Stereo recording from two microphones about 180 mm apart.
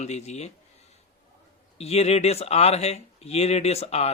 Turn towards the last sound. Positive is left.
turn(degrees=35)  # may be behind; listen again after turning